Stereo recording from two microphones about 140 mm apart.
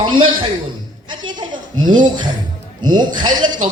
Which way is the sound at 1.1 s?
35° right (ahead or behind).